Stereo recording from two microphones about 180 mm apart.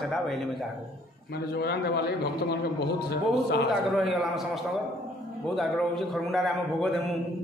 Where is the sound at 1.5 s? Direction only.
65° left (ahead or behind).